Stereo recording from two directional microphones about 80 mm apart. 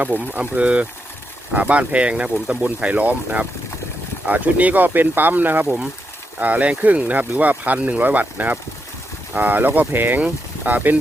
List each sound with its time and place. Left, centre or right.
0.0 s speech: right